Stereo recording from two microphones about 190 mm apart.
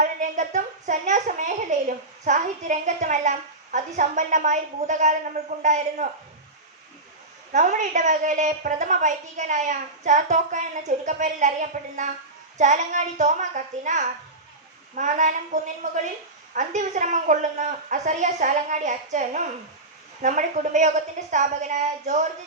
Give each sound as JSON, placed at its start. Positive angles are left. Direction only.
{"t": 0.0, "sound": "a sound", "side_deg": -40}
{"t": 2.2, "sound": "a woman's voice", "side_deg": -40}
{"t": 7.5, "sound": "a woman's voice", "side_deg": -40}